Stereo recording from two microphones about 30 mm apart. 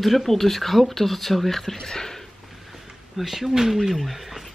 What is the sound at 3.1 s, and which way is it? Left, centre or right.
Speech, centre.